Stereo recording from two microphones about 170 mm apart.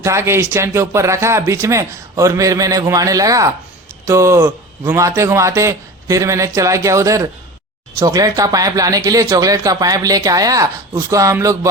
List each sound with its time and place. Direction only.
0.0 s speech: 15° right (ahead or behind)